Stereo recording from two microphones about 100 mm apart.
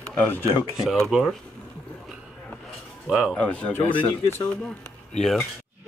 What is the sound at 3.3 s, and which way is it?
Speech, 10° left (ahead or behind).